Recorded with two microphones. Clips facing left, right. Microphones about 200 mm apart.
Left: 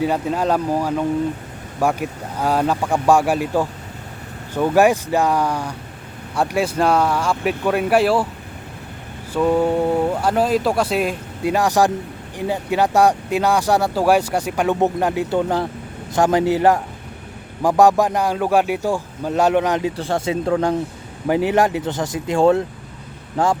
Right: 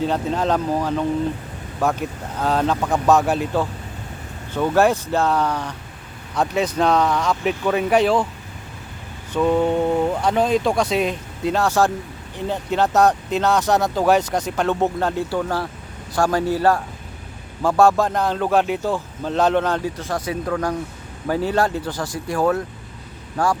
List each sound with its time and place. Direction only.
0.0 s speech: 10° left (ahead or behind)
9.3 s speech: 5° left (ahead or behind)
20.0 s speech: 30° left (ahead or behind)